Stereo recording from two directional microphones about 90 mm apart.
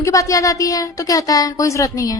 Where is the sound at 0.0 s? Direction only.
40° left (ahead or behind).